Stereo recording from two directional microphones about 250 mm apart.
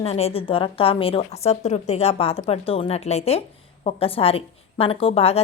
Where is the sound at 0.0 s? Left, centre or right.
Left.